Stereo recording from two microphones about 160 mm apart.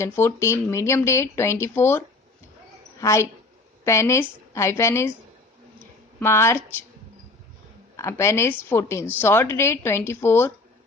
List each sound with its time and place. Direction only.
0.0 s a woman's voice: 15° left (ahead or behind)
7.9 s a woman's voice: 15° left (ahead or behind)